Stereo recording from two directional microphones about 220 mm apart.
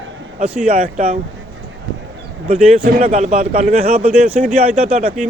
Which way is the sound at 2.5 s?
30° right (ahead or behind).